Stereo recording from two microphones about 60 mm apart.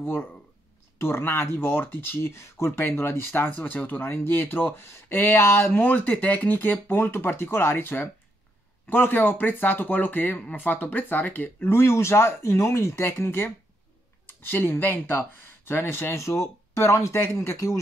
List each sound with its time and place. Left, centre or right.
0.0 s speech: left
4.1 s speech: left
5.7 s speech: left
11.8 s speech: left
16.2 s speech: left